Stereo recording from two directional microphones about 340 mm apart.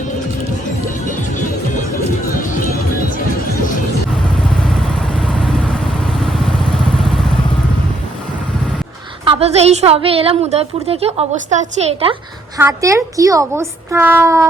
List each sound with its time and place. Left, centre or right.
9.2 s a woman's voice: centre